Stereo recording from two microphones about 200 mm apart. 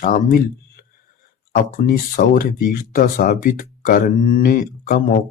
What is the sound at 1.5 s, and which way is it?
Speech, 45° left (ahead or behind).